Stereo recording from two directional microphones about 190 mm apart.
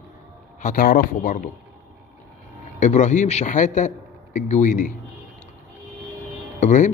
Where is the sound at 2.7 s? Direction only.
40° left (ahead or behind).